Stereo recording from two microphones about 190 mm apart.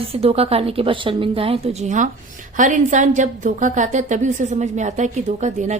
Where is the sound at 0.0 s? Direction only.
30° right (ahead or behind).